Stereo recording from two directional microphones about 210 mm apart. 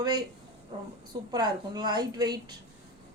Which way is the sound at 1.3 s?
20° right (ahead or behind).